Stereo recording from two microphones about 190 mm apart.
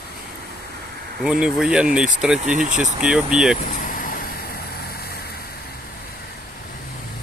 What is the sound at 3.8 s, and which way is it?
Vehicle, 45° left (ahead or behind).